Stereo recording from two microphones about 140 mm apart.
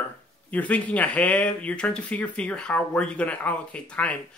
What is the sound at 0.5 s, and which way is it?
Speech, 10° left (ahead or behind).